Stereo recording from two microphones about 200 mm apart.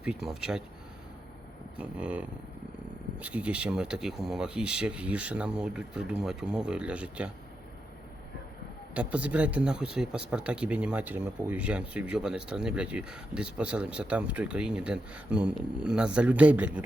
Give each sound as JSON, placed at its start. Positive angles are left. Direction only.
{"t": 0.0, "sound": "speech", "side_deg": -5}
{"t": 1.7, "sound": "speech", "side_deg": -5}
{"t": 9.0, "sound": "speech", "side_deg": -5}